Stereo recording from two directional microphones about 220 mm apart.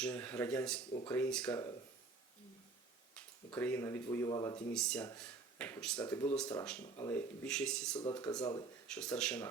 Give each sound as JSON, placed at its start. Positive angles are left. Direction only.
{"t": 0.0, "sound": "speech", "side_deg": 5}
{"t": 3.2, "sound": "speech", "side_deg": 5}
{"t": 4.7, "sound": "speech", "side_deg": 5}
{"t": 8.1, "sound": "speech", "side_deg": 15}
{"t": 8.9, "sound": "speech", "side_deg": 5}